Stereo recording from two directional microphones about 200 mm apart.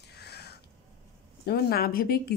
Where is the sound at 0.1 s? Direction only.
55° left (ahead or behind).